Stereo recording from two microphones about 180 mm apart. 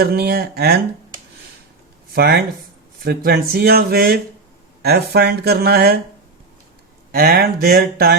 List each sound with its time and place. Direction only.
0.0 s speech: 60° right (ahead or behind)
2.1 s speech: 60° right (ahead or behind)
7.1 s speech: 55° right (ahead or behind)